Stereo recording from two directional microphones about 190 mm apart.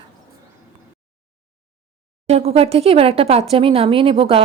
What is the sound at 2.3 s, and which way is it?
Speech, 30° right (ahead or behind).